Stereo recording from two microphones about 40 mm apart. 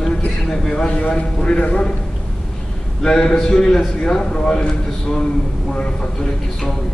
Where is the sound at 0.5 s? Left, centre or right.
Centre.